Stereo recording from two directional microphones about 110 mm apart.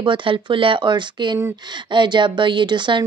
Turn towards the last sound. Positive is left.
turn(degrees=-45)  # may be behind; listen again after turning